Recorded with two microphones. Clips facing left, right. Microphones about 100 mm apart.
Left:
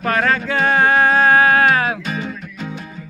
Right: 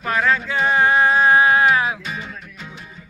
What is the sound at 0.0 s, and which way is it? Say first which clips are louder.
Music: left 2 dB; 55° left (ahead or behind).